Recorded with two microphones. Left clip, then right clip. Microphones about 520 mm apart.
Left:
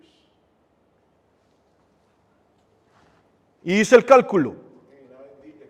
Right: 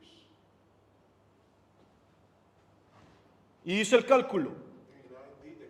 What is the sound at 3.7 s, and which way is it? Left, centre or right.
Speech, left.